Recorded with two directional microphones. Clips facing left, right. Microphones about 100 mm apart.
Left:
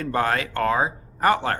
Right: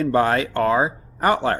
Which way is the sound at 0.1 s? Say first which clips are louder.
Right 1 dB; 20° right (ahead or behind).